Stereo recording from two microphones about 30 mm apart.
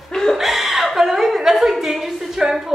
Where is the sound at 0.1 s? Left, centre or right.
Centre.